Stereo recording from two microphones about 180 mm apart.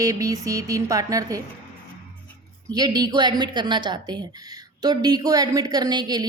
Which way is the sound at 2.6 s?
20° right (ahead or behind).